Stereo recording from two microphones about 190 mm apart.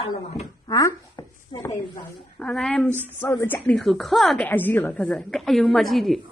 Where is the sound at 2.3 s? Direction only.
5° left (ahead or behind).